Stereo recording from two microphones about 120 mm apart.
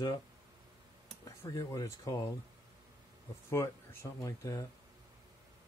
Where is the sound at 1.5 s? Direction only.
30° left (ahead or behind).